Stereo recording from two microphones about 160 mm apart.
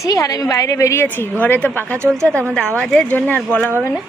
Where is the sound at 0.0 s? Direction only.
20° left (ahead or behind).